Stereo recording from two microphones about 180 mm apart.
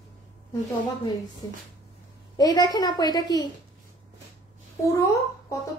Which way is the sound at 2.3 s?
20° left (ahead or behind).